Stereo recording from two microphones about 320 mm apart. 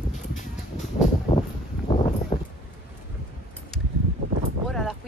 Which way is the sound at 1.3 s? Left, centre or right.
Centre.